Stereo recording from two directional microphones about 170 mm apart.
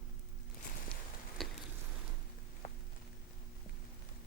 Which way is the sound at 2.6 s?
45° left (ahead or behind).